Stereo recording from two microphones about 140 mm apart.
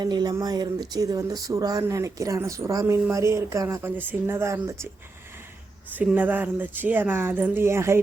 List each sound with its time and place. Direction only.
0.0 s speech: 30° right (ahead or behind)
6.0 s speech: 10° right (ahead or behind)